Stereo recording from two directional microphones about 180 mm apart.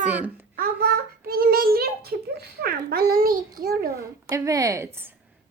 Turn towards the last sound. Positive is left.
turn(degrees=-15)  # may be behind; listen again after turning